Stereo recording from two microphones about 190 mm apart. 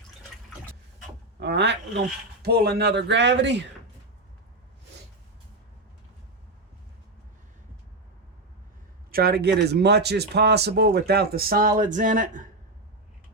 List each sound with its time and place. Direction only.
1.4 s speech: 60° right (ahead or behind)
9.1 s speech: 55° right (ahead or behind)